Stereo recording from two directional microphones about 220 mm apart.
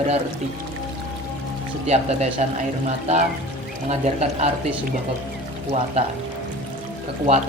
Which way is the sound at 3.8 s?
30° right (ahead or behind).